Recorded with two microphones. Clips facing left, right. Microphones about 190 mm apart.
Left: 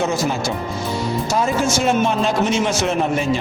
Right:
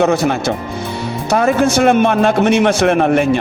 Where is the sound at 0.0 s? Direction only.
60° right (ahead or behind).